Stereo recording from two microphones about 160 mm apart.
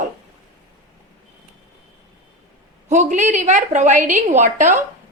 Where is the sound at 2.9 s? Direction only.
50° right (ahead or behind).